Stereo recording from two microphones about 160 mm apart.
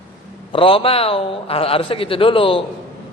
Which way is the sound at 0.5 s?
35° left (ahead or behind).